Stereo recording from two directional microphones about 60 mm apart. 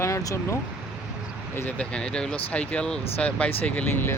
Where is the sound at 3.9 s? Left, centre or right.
Left.